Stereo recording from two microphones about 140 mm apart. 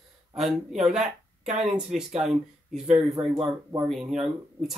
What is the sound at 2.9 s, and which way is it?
Speech, 45° right (ahead or behind).